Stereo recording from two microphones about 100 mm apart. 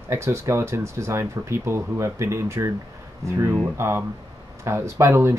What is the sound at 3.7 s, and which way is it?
Speech, 25° right (ahead or behind).